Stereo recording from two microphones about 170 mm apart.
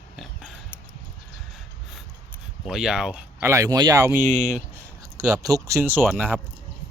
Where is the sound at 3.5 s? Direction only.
20° right (ahead or behind).